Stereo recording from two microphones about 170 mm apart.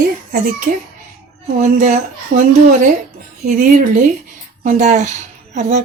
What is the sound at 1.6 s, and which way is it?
Speech, 50° right (ahead or behind).